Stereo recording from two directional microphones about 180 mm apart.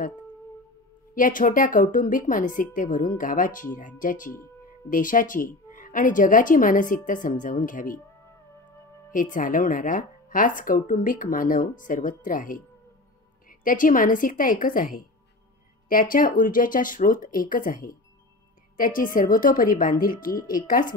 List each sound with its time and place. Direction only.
1.1 s a woman's voice: 50° left (ahead or behind)
9.1 s a woman's voice: 45° left (ahead or behind)